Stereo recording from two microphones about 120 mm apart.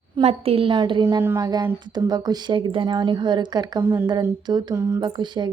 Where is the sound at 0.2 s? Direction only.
55° right (ahead or behind); by 1.0 s 40° right (ahead or behind).